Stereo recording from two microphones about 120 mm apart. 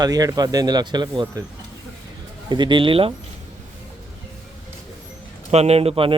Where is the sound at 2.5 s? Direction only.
40° right (ahead or behind).